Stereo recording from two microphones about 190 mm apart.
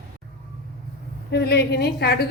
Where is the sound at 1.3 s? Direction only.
60° left (ahead or behind).